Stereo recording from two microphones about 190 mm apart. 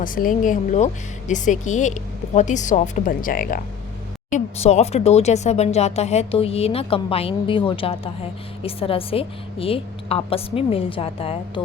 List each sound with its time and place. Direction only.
0.0 s a woman's voice: 45° left (ahead or behind); by 11.6 s 30° left (ahead or behind)